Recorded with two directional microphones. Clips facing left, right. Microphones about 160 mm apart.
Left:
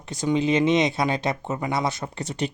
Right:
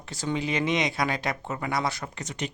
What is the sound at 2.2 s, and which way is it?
Speech, 35° left (ahead or behind).